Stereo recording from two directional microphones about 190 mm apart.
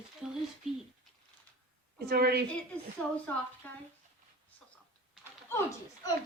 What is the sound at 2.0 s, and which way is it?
Speech, 55° right (ahead or behind).